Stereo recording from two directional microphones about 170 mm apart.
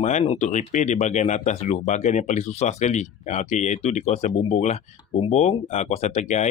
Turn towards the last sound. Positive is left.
turn(degrees=45)  # may be behind; listen again after turning